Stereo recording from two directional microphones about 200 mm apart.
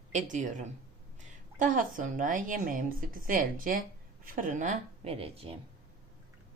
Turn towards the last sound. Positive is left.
turn(degrees=-30)  # may be behind; listen again after turning